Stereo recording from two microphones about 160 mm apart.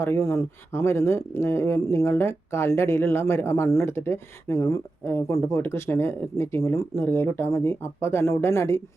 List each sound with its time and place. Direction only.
0.0 s speech: 20° left (ahead or behind)